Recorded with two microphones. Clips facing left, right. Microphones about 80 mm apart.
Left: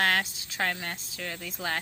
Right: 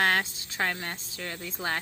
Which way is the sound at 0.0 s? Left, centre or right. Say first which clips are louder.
Right 1 dB; right.